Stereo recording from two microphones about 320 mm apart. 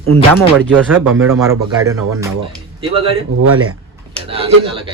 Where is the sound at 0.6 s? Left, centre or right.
Centre.